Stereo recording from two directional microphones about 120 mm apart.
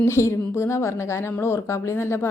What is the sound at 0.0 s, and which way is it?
A woman's voice, 25° left (ahead or behind).